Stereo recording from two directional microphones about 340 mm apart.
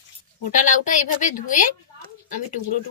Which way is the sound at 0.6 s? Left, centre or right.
Left.